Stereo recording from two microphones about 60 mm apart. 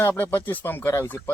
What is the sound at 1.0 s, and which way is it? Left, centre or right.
Speech, left.